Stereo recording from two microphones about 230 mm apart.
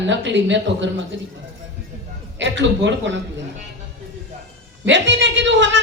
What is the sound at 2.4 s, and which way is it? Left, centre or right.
Speech, right.